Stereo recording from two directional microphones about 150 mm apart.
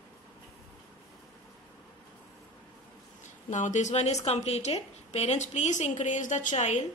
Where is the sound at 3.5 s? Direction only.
55° left (ahead or behind).